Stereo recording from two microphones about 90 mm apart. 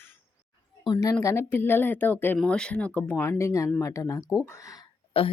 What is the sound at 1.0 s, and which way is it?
Speech, 35° left (ahead or behind).